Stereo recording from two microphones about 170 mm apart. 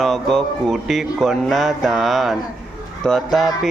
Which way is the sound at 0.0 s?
Centre (ahead or behind).